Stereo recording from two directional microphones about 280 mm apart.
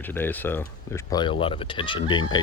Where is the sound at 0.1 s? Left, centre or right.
Centre.